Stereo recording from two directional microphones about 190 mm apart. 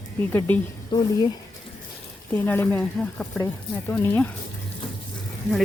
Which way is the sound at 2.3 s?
10° left (ahead or behind).